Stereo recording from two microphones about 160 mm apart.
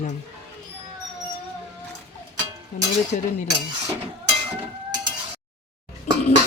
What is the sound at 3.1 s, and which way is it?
Speech, 50° left (ahead or behind).